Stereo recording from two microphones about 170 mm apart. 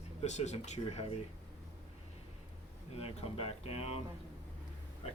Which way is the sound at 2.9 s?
35° left (ahead or behind).